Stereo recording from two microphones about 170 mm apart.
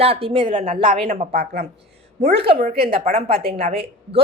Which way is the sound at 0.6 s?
45° right (ahead or behind).